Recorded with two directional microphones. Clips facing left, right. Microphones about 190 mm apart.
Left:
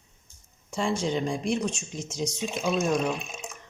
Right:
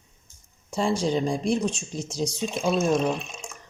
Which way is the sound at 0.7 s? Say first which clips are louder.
Right 3 dB; 35° right (ahead or behind).